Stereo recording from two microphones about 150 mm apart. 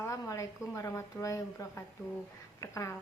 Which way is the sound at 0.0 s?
20° left (ahead or behind).